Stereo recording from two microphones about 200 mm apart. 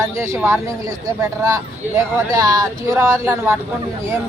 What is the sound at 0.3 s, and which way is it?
Speech, 15° right (ahead or behind).